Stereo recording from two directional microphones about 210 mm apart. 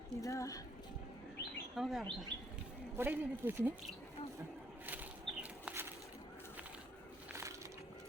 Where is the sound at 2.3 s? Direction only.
20° right (ahead or behind).